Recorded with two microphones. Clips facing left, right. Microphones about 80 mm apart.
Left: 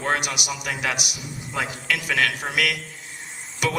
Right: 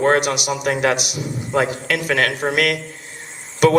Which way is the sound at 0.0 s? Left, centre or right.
Right.